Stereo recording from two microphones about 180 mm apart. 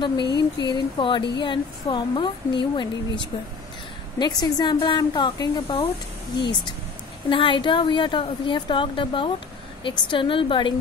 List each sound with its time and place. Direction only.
0.0 s a woman's voice: 25° left (ahead or behind)
7.2 s a woman's voice: 25° left (ahead or behind)